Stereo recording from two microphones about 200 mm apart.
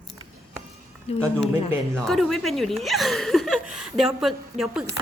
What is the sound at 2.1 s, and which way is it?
Speech, centre (ahead or behind).